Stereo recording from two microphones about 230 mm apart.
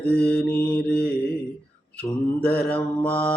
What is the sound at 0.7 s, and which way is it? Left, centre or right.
Mantra, left.